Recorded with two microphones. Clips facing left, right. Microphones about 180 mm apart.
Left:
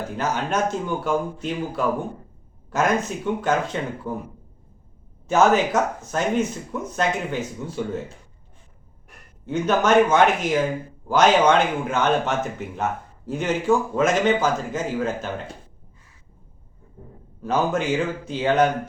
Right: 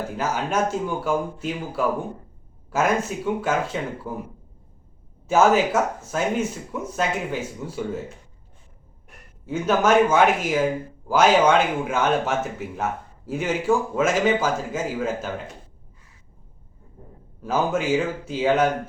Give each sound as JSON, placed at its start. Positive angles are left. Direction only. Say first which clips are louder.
{"t": 0.2, "sound": "speech", "louder": "even", "side_deg": -5}
{"t": 5.3, "sound": "speech", "louder": "even", "side_deg": -5}
{"t": 9.5, "sound": "a man's voice", "louder": "even", "side_deg": -5}
{"t": 17.4, "sound": "a man's voice", "louder": "left 1 dB", "side_deg": -5}